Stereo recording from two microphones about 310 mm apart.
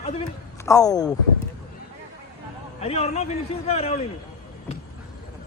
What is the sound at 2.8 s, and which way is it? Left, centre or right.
A man's voice, centre.